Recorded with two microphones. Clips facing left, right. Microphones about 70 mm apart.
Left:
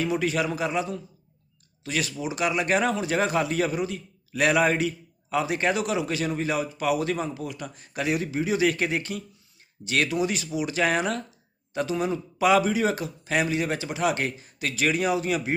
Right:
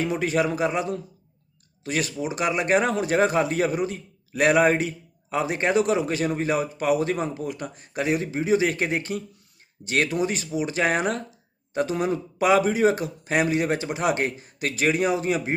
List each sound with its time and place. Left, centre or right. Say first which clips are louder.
0.0 s a man's voice: right 2 dB; right